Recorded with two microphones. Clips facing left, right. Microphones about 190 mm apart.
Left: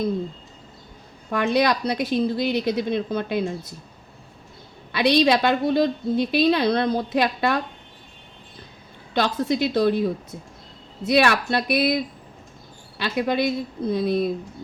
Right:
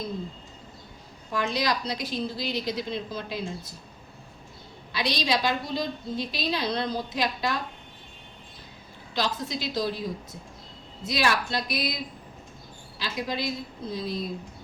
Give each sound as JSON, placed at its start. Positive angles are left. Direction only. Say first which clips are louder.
{"t": 1.3, "sound": "a woman's voice", "louder": "left 7 dB", "side_deg": 60}
{"t": 4.9, "sound": "a woman's voice", "louder": "left 9 dB", "side_deg": 60}
{"t": 9.1, "sound": "a woman's voice", "louder": "left 8 dB", "side_deg": 60}
{"t": 11.0, "sound": "a woman's voice", "louder": "left 7 dB", "side_deg": 65}
{"t": 13.0, "sound": "a woman's voice", "louder": "left 9 dB", "side_deg": 60}